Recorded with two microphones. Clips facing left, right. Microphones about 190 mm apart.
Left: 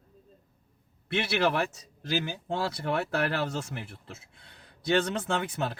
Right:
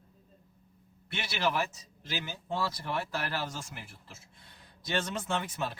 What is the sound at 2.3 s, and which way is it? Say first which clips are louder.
A man's voice: left 3 dB; 65° left (ahead or behind).